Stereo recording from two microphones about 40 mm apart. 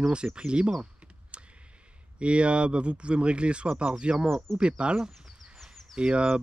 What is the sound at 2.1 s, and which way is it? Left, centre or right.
Speech, right.